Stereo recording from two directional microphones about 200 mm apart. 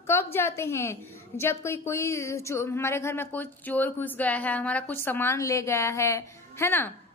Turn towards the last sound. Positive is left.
turn(degrees=10)  # may be behind; listen again after turning